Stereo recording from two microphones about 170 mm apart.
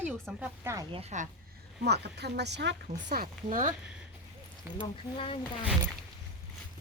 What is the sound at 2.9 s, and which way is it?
Speech, 55° right (ahead or behind).